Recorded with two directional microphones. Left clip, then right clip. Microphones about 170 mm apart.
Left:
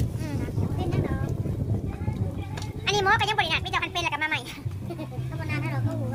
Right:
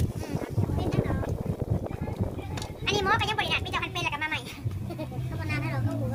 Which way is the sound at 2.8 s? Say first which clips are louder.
Left 3 dB; 50° left (ahead or behind).